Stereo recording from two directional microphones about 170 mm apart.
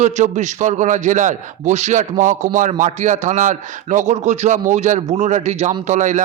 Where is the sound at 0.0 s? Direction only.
45° right (ahead or behind).